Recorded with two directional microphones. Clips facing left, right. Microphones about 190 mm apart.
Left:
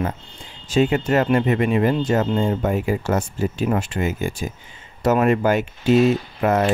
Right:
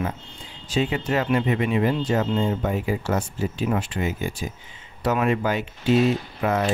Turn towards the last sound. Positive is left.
turn(degrees=50)  # may be behind; listen again after turning